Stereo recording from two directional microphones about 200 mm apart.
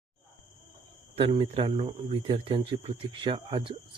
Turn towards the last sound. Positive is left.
turn(degrees=-25)  # may be behind; listen again after turning